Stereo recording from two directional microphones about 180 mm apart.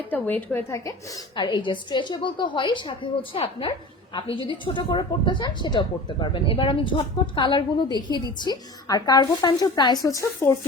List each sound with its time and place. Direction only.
0.1 s a woman's voice: 10° left (ahead or behind)